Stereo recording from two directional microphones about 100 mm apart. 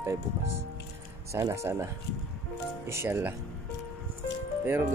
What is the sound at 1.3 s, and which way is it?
Speech, 30° right (ahead or behind).